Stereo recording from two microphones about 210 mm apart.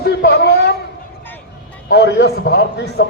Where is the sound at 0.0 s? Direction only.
50° left (ahead or behind).